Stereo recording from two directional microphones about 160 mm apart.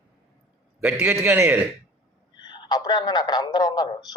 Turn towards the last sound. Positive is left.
turn(degrees=25)  # may be behind; listen again after turning